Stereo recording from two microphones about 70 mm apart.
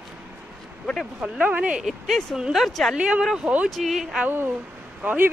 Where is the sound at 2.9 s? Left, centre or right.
Centre.